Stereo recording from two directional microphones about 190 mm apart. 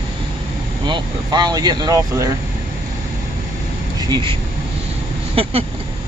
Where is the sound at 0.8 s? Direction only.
25° right (ahead or behind).